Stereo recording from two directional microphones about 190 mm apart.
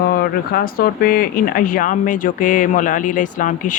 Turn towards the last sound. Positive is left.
turn(degrees=45)  # may be behind; listen again after turning